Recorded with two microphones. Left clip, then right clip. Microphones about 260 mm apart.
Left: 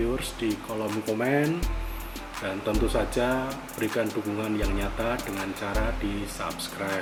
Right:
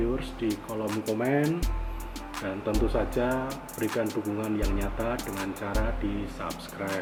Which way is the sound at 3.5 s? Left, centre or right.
Centre.